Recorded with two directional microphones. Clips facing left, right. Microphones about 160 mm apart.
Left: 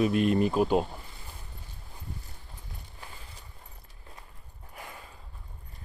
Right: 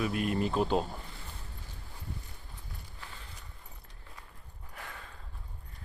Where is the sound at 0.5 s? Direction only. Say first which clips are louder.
Left 4 dB; 10° left (ahead or behind).